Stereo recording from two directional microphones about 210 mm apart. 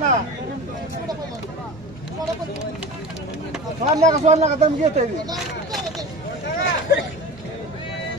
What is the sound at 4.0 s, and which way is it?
Speech, 35° right (ahead or behind).